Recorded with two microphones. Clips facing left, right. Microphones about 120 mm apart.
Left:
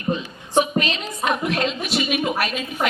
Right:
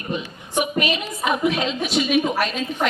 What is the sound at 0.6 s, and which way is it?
A woman's voice, 10° right (ahead or behind).